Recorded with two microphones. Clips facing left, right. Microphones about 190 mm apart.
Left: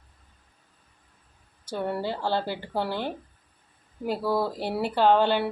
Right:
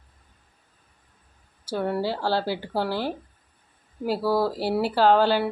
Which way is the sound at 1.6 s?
5° right (ahead or behind).